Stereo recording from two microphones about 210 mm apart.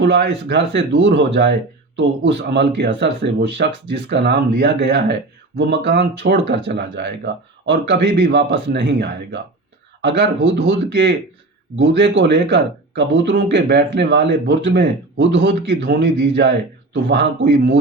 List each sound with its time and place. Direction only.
0.0 s speech: 55° right (ahead or behind)